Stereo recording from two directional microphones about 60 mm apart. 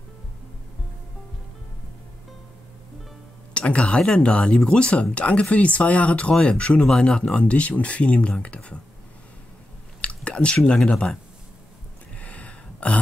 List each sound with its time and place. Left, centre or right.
3.5 s speech: centre
10.0 s chewing: centre
10.8 s speech: centre
12.2 s a sound: left